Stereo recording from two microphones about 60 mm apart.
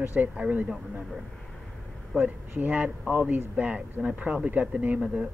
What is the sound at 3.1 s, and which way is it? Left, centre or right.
Speech, right.